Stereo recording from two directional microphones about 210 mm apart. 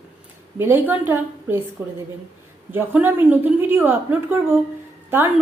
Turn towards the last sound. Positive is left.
turn(degrees=-10)  # may be behind; listen again after turning